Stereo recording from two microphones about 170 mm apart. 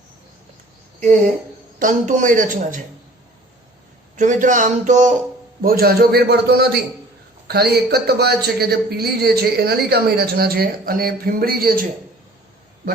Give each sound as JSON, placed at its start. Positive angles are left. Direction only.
{"t": 1.8, "sound": "speech", "side_deg": -50}
{"t": 4.2, "sound": "speech", "side_deg": -50}
{"t": 5.6, "sound": "a woman's voice", "side_deg": -60}